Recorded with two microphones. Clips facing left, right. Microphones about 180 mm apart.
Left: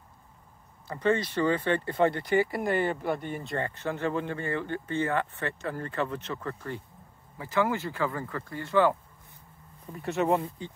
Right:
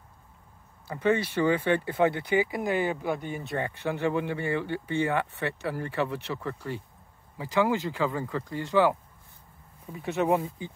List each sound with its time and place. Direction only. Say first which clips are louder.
0.8 s speech: right 1 dB; 10° right (ahead or behind)
9.9 s speech: right 1 dB; centre (ahead or behind)